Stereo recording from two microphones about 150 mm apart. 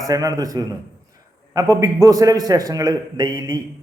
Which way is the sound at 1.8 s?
20° right (ahead or behind).